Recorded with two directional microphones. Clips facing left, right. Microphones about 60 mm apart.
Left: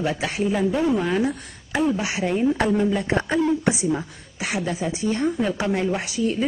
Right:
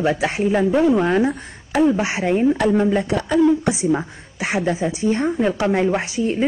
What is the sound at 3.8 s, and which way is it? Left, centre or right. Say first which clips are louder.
A woman's voice: right 4 dB; right.